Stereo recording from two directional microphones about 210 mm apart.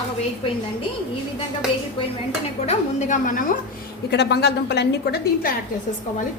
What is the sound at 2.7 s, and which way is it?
Speech, 40° left (ahead or behind).